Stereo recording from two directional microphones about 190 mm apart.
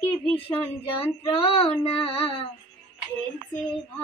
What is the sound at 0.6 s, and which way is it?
Child singing, 30° left (ahead or behind).